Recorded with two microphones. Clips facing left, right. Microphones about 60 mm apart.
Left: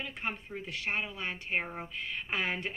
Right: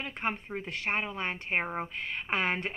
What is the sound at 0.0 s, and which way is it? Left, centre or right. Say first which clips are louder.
A woman's voice: right 4 dB; right.